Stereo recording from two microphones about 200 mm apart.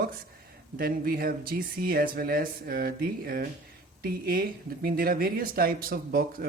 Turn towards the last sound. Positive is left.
turn(degrees=-50)  # may be behind; listen again after turning